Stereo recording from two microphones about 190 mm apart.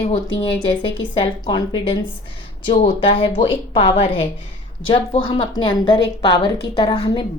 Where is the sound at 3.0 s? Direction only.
30° left (ahead or behind).